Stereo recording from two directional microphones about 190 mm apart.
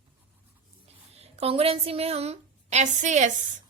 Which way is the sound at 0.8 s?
30° right (ahead or behind).